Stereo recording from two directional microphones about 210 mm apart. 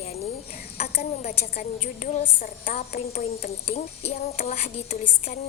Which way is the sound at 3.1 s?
30° left (ahead or behind).